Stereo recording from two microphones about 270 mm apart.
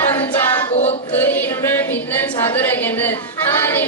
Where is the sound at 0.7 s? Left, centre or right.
Left.